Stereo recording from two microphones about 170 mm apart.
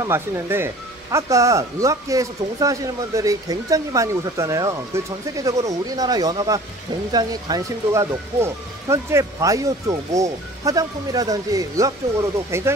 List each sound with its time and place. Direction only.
0.0 s speech: 15° right (ahead or behind)